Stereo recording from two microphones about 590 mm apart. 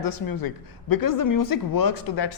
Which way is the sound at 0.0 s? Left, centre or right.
Left.